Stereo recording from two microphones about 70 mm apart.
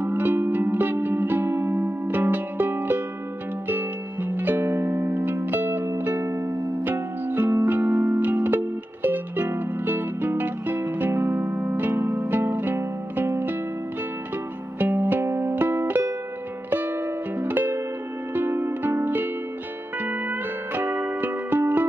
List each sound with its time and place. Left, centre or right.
0.0 s music: right
14.8 s music: right